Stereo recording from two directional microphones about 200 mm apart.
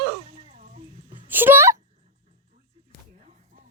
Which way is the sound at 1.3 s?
10° right (ahead or behind).